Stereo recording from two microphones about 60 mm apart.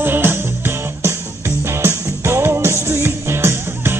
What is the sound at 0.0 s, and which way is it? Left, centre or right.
Music, right.